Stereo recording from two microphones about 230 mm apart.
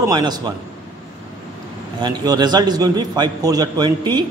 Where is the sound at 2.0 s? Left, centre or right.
Centre.